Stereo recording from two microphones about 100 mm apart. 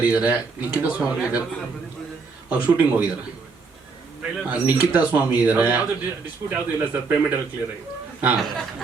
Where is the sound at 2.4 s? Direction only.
15° right (ahead or behind).